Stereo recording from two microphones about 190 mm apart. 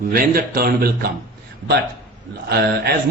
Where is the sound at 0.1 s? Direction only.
50° right (ahead or behind).